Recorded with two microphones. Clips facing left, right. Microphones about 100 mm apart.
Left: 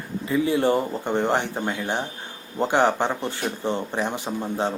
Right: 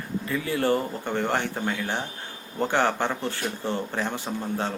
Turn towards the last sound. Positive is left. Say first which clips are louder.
# left 3 dB
turn(degrees=20)  # may be behind; listen again after turning